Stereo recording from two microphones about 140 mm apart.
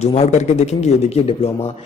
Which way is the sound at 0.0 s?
55° left (ahead or behind).